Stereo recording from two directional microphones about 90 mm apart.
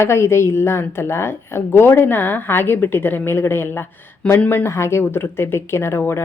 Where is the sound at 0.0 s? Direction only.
30° left (ahead or behind).